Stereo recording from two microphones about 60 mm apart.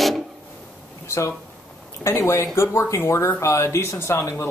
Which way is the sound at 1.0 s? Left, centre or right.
Left.